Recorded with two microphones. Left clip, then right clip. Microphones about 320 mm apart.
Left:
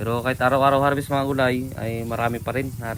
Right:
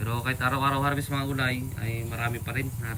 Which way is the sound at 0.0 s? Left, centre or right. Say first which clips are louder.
Left 7 dB; centre.